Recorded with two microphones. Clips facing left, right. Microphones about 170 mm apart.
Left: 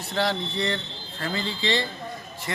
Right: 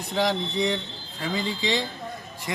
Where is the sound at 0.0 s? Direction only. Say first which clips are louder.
Right 1 dB; 15° right (ahead or behind).